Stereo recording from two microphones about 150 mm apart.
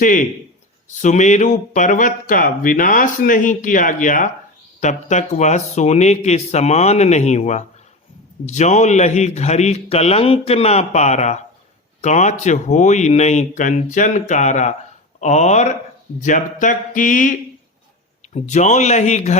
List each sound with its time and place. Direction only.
0.0 s a man's voice: 60° left (ahead or behind)
18.3 s a man's voice: 50° left (ahead or behind)